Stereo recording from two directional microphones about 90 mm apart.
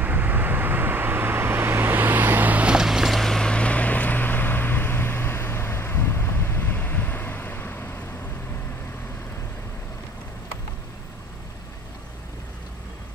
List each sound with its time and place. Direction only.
0.0 s vehicle: 20° right (ahead or behind); by 8.0 s 25° left (ahead or behind)